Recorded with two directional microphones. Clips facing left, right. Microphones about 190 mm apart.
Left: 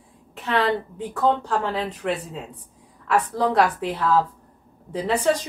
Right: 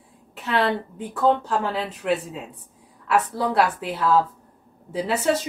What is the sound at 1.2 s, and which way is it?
A woman's voice, 5° right (ahead or behind).